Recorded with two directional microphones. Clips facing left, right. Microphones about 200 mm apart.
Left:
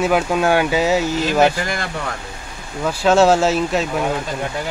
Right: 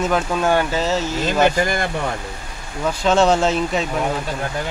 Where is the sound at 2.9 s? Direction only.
10° left (ahead or behind).